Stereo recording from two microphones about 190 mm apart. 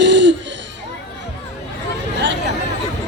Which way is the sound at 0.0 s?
70° right (ahead or behind).